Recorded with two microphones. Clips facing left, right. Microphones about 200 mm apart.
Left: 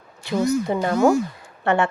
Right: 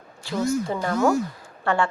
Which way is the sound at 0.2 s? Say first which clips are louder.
Left 3 dB; 20° left (ahead or behind).